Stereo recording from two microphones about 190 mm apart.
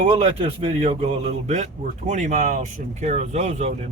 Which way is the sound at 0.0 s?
30° right (ahead or behind).